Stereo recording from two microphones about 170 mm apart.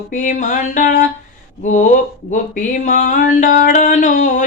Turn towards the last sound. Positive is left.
turn(degrees=45)  # may be behind; listen again after turning